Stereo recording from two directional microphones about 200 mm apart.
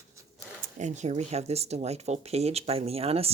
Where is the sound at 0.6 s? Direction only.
35° right (ahead or behind).